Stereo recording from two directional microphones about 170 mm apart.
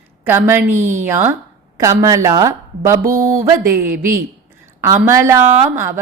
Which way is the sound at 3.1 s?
50° right (ahead or behind).